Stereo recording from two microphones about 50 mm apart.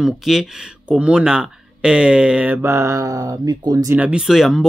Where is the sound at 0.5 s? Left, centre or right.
Right.